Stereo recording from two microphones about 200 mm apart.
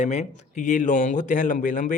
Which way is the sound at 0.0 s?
35° left (ahead or behind).